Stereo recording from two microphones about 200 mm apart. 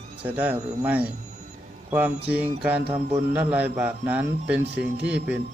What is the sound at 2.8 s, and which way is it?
Speech, 30° right (ahead or behind).